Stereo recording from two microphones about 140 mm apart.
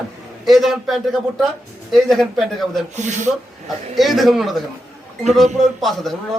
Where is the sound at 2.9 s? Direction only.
60° right (ahead or behind).